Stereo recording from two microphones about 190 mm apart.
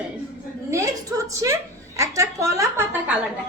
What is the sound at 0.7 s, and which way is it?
A woman's voice, 15° right (ahead or behind).